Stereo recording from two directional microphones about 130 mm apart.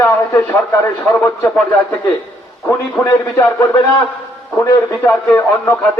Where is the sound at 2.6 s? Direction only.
15° left (ahead or behind).